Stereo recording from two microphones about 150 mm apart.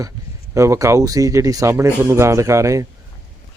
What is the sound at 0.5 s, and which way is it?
Speech, 20° right (ahead or behind).